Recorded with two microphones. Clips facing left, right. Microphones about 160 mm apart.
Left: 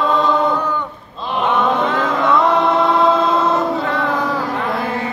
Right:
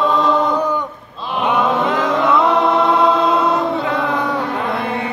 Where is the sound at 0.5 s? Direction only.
15° right (ahead or behind).